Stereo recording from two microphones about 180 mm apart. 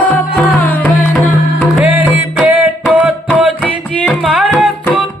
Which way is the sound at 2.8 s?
10° right (ahead or behind).